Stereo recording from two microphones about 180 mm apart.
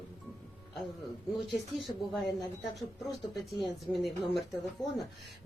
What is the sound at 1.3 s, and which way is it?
Speech, centre (ahead or behind).